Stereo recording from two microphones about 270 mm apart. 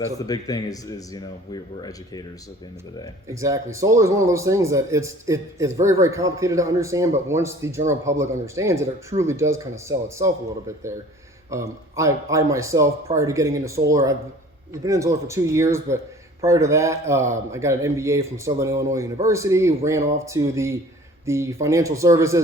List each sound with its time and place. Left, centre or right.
0.3 s speech: centre
3.4 s speech: centre
11.5 s speech: centre